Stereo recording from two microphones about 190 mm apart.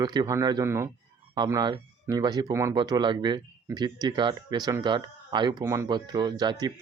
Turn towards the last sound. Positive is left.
turn(degrees=-20)  # may be behind; listen again after turning